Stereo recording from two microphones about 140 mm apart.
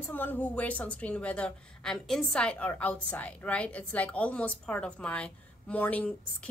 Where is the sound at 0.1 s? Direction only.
15° left (ahead or behind).